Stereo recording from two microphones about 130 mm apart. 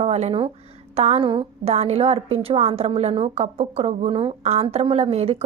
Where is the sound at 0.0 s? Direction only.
55° right (ahead or behind).